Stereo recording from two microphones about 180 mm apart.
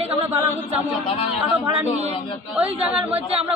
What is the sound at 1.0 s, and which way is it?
Speech, 30° left (ahead or behind).